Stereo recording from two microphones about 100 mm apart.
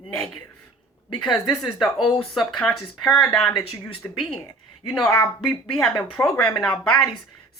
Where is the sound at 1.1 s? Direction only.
5° left (ahead or behind).